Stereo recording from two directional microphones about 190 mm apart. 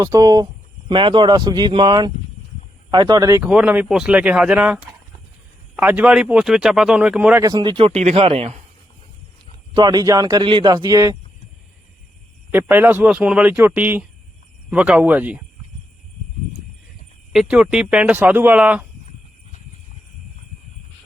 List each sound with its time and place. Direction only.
0.0 s a man's voice: 20° right (ahead or behind)
3.4 s speech: 5° right (ahead or behind); by 8.5 s 30° right (ahead or behind)
9.7 s a man's voice: 20° right (ahead or behind)
12.5 s speech: 10° right (ahead or behind)
17.3 s speech: 5° right (ahead or behind)